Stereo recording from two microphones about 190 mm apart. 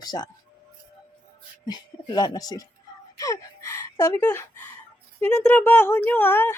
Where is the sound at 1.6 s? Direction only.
20° left (ahead or behind).